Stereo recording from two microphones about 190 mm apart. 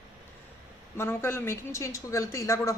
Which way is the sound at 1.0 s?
15° left (ahead or behind).